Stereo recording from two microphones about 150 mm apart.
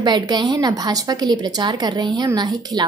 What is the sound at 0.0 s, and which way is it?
A woman's voice, 30° right (ahead or behind).